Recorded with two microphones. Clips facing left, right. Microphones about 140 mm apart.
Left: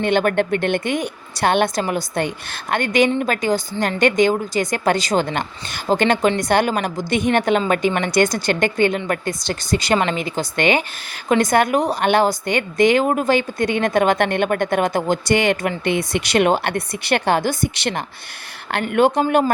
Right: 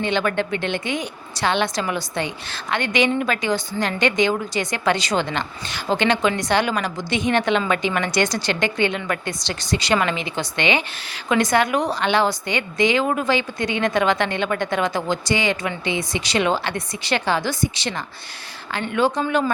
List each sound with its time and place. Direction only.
0.0 s a woman's voice: 50° left (ahead or behind)